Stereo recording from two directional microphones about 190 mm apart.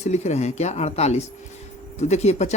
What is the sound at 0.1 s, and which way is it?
Speech, 35° left (ahead or behind).